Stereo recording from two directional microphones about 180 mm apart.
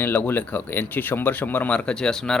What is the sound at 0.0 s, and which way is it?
Speech, 10° left (ahead or behind).